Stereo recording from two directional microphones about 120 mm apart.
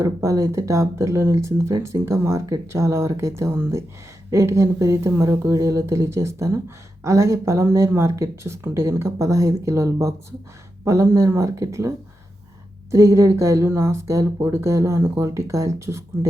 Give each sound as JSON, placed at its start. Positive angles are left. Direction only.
{"t": 0.0, "sound": "speech", "side_deg": -25}